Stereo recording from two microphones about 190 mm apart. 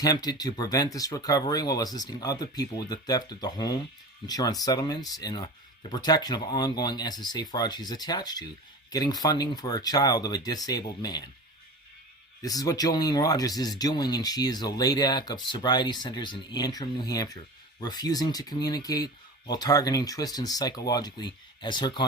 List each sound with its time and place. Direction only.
0.0 s speech: 20° left (ahead or behind)
12.4 s speech: 20° left (ahead or behind)